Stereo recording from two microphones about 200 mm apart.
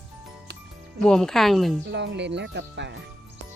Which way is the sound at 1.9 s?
60° right (ahead or behind).